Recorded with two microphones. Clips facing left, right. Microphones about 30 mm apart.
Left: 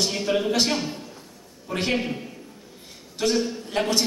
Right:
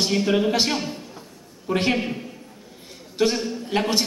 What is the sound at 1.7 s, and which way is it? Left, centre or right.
Speech, centre.